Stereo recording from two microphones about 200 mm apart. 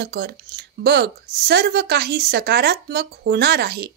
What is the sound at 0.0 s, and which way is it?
A woman's voice, 55° right (ahead or behind).